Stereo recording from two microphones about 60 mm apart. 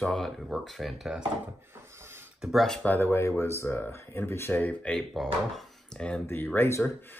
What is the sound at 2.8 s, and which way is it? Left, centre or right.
Speech, left.